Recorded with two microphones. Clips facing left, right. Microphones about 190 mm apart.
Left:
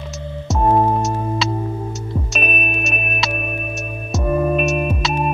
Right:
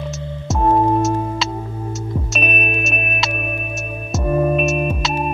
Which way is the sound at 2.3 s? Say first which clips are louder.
Right 2 dB; centre (ahead or behind).